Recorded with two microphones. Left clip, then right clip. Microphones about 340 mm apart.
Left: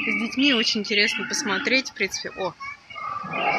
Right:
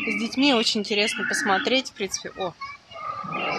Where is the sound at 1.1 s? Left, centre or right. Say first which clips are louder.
Right 2 dB; right.